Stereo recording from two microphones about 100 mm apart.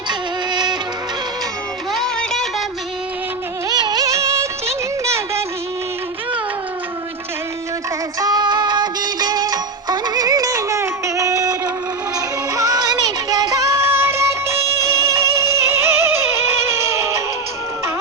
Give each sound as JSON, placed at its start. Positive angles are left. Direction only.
{"t": 0.1, "sound": "music", "side_deg": -45}
{"t": 1.9, "sound": "music", "side_deg": 5}
{"t": 3.7, "sound": "music of bollywood", "side_deg": -45}
{"t": 5.0, "sound": "music", "side_deg": -30}
{"t": 8.2, "sound": "music", "side_deg": -40}